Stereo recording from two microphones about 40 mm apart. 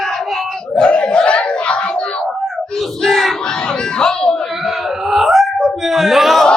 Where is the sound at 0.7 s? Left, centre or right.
Left.